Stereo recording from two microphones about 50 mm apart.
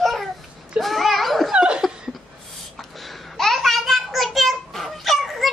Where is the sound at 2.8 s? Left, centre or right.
Centre.